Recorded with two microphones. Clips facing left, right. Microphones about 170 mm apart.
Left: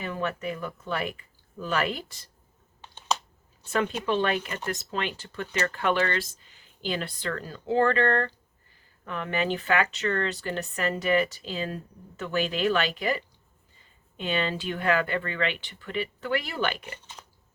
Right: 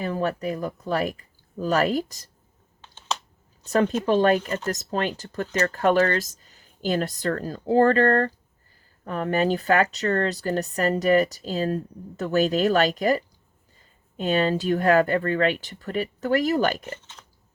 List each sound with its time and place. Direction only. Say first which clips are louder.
0.0 s speech: right 5 dB; 35° right (ahead or behind)
2.8 s a sound: left 2 dB; 15° left (ahead or behind)
3.7 s speech: right 6 dB; 40° right (ahead or behind)